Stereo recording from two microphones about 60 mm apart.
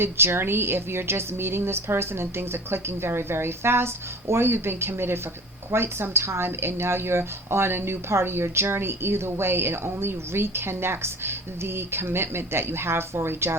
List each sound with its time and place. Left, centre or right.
0.0 s a woman's voice: right